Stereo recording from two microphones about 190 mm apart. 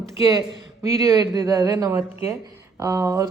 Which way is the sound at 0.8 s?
15° right (ahead or behind).